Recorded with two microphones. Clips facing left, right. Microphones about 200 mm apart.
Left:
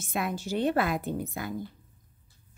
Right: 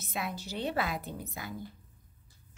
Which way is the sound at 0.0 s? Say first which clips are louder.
Left 6 dB; 50° left (ahead or behind).